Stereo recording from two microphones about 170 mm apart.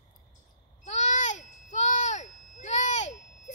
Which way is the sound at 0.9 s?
45° left (ahead or behind).